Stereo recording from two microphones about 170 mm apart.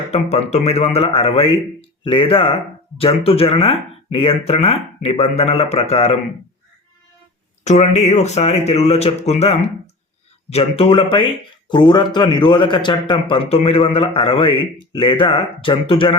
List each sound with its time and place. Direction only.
0.1 s speech: 40° left (ahead or behind)
7.6 s a man's voice: 40° left (ahead or behind)